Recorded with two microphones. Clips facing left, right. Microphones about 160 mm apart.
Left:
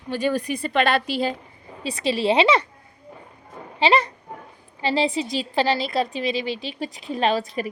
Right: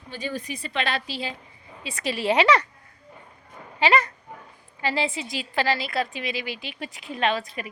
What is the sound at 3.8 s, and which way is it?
A woman's voice, 30° left (ahead or behind).